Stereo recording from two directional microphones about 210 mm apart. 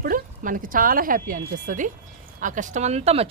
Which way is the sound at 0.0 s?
40° right (ahead or behind).